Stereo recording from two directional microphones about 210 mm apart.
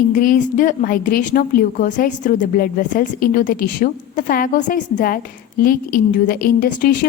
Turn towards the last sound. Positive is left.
turn(degrees=40)  # may be behind; listen again after turning